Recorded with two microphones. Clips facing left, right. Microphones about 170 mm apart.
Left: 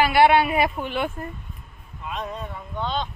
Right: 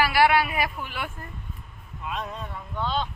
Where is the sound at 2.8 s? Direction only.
5° right (ahead or behind).